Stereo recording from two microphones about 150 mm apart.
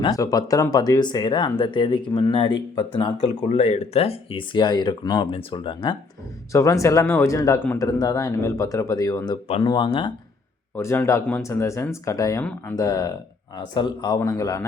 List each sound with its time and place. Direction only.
0.0 s speech: 25° left (ahead or behind)
3.2 s speech: 45° left (ahead or behind)
6.5 s speech: 20° left (ahead or behind)
10.8 s speech: 15° left (ahead or behind)